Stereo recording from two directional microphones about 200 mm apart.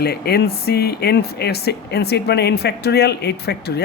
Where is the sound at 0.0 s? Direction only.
50° left (ahead or behind).